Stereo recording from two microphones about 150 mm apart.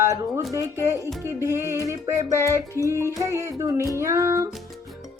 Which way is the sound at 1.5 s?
20° right (ahead or behind).